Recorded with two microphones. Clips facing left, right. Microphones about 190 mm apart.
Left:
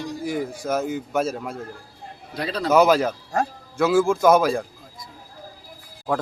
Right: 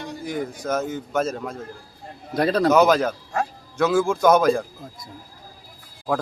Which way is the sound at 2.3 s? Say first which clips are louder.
Right 6 dB; 45° right (ahead or behind).